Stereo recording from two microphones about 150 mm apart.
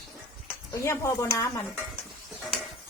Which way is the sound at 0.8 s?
20° left (ahead or behind).